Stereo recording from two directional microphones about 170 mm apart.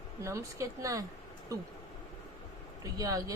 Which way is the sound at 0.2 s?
15° right (ahead or behind).